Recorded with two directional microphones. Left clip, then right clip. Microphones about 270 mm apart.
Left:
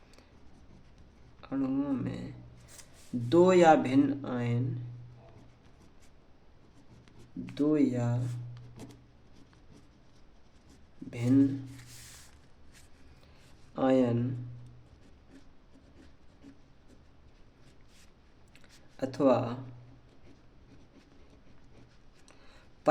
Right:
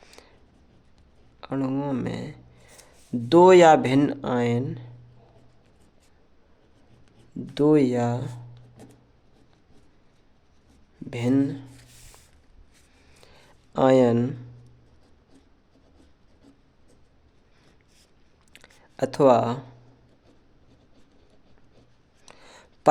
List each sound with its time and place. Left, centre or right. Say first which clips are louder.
1.4 s speech: right 5 dB; right
7.5 s speech: right 9 dB; right
11.1 s speech: right 3 dB; right
13.7 s speech: right 9 dB; right
18.5 s a sound: right 10 dB; right
22.3 s a sound: right 10 dB; right